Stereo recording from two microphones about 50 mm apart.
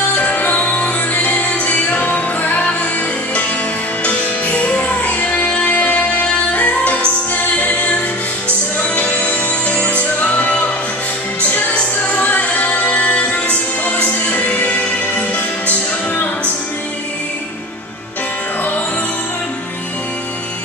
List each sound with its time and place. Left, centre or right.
0.1 s music: left
4.0 s music: left
8.7 s music: left
11.7 s music: left